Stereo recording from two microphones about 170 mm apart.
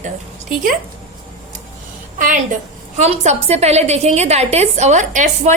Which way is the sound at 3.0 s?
40° right (ahead or behind).